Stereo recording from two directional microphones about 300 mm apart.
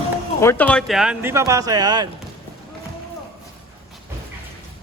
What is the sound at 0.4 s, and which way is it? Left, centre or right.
Speech, centre.